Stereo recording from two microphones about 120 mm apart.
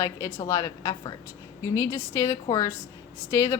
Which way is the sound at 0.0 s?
25° left (ahead or behind).